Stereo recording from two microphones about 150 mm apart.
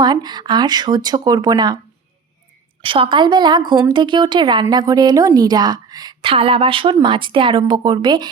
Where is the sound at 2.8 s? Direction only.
35° right (ahead or behind).